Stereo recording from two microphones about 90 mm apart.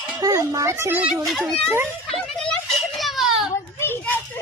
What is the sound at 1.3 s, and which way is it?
Speech, centre (ahead or behind).